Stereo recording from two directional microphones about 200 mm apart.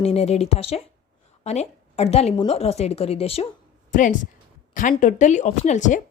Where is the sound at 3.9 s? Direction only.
40° left (ahead or behind).